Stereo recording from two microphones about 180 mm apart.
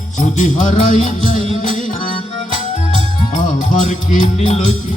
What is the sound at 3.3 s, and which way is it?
Music, 45° left (ahead or behind).